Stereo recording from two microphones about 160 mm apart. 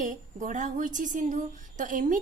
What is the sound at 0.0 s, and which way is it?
A woman's voice, 55° right (ahead or behind).